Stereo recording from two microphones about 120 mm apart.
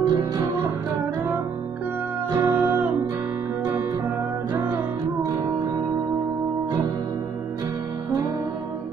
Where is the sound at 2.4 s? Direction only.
15° right (ahead or behind).